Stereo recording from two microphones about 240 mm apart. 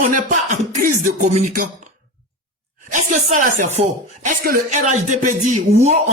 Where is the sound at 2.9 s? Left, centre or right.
Right.